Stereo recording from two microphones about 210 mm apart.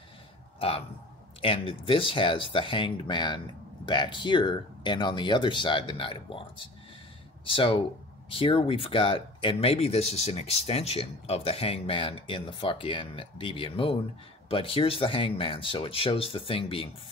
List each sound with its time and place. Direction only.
0.6 s speech: 25° left (ahead or behind)